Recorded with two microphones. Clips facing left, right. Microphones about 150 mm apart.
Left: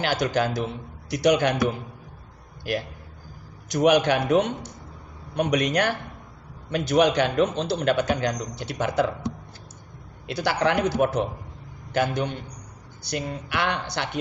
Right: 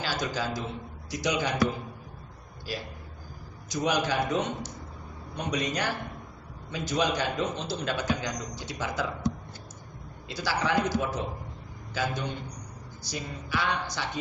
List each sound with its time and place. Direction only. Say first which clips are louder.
0.0 s a man's voice: left 7 dB; 65° left (ahead or behind)
10.2 s a man's voice: left 6 dB; 65° left (ahead or behind)